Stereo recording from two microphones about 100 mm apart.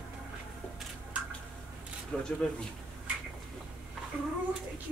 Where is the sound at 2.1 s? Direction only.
10° left (ahead or behind).